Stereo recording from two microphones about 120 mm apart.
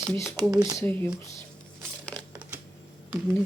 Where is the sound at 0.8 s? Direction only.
25° left (ahead or behind).